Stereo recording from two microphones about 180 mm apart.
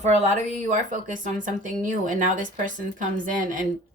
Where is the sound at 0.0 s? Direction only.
40° right (ahead or behind).